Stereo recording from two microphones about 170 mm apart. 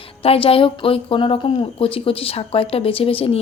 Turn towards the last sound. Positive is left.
turn(degrees=35)  # may be behind; listen again after turning